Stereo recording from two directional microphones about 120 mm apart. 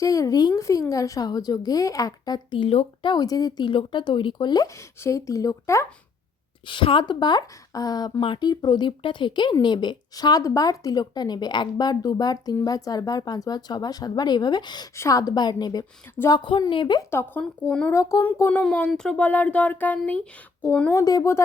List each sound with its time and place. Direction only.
0.0 s a woman's voice: 30° left (ahead or behind)
2.6 s speech: 50° left (ahead or behind)
3.1 s speech: 30° left (ahead or behind)
4.9 s a woman's voice: 25° left (ahead or behind)
6.7 s speech: 45° left (ahead or behind)
17.0 s a woman's voice: 20° left (ahead or behind)
17.4 s speech: 5° left (ahead or behind)
17.9 s a woman's voice: 30° left (ahead or behind)
18.2 s speech: 15° left (ahead or behind)
18.6 s a woman's voice: 5° left (ahead or behind)
20.9 s a woman's voice: 30° left (ahead or behind)